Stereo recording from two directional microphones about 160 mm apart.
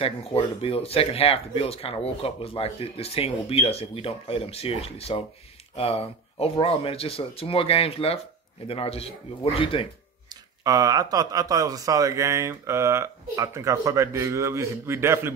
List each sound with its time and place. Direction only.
0.0 s speech: 35° left (ahead or behind)
10.6 s speech: 20° right (ahead or behind)